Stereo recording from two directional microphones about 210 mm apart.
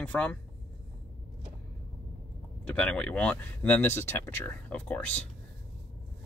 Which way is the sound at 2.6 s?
5° left (ahead or behind).